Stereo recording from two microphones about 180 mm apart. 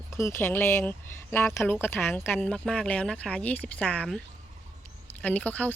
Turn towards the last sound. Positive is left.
turn(degrees=10)  # may be behind; listen again after turning